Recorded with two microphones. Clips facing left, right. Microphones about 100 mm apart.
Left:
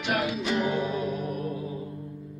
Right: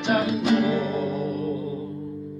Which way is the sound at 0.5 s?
90° right.